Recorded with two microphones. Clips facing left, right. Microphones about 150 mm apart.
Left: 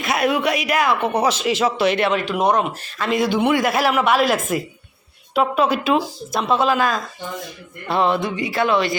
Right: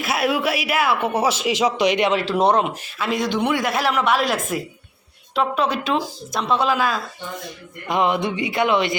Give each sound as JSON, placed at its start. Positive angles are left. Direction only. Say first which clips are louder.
{"t": 0.0, "sound": "speech", "louder": "left 2 dB", "side_deg": -5}
{"t": 2.2, "sound": "speech", "louder": "right 1 dB", "side_deg": -30}
{"t": 2.8, "sound": "speech", "louder": "left 2 dB", "side_deg": -10}
{"t": 3.2, "sound": "a woman's voice", "louder": "left 4 dB", "side_deg": 5}
{"t": 7.9, "sound": "music", "louder": "left 1 dB", "side_deg": -15}